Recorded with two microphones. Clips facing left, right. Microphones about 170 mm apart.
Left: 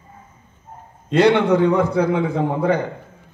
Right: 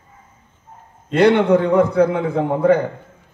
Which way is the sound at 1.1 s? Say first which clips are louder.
Right 1 dB; 55° right (ahead or behind).